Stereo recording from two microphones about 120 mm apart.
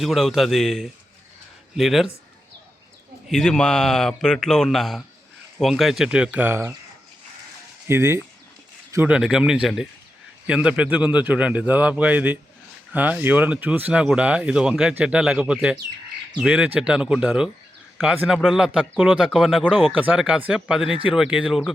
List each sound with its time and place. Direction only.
0.0 s speech: centre (ahead or behind)
3.2 s speech: 5° left (ahead or behind); by 6.7 s 20° right (ahead or behind)
7.9 s speech: 20° right (ahead or behind)
9.0 s speech: 5° right (ahead or behind)